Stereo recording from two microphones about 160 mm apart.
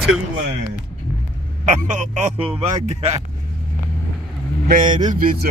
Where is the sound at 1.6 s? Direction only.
50° right (ahead or behind).